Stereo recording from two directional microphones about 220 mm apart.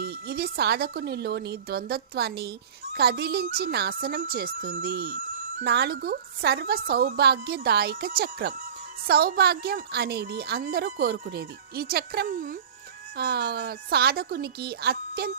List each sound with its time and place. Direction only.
0.0 s a woman's voice: 45° right (ahead or behind)